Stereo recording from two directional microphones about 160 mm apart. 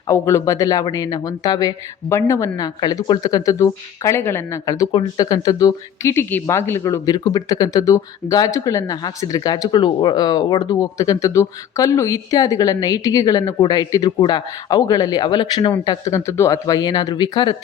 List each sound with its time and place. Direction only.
0.1 s speech: 20° left (ahead or behind)